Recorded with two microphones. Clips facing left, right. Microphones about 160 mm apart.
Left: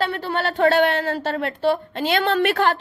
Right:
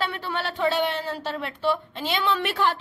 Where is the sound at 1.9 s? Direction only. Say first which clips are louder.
Left 6 dB; 65° left (ahead or behind).